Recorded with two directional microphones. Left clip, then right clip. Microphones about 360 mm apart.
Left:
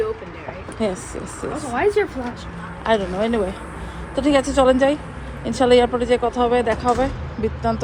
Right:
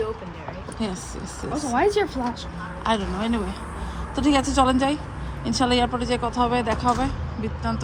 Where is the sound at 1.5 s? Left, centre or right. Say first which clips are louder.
Left 2 dB; right.